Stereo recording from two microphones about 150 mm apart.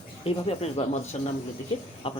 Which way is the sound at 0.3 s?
45° left (ahead or behind).